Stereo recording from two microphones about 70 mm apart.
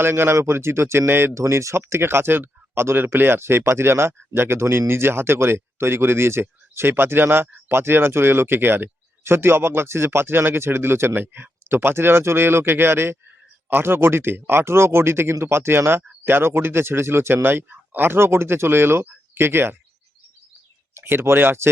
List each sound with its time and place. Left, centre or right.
0.0 s speech: right
20.9 s speech: right